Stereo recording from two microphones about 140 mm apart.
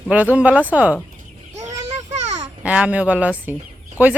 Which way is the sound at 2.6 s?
10° right (ahead or behind).